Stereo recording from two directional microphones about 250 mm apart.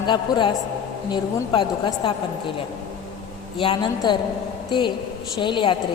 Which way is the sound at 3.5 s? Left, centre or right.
Centre.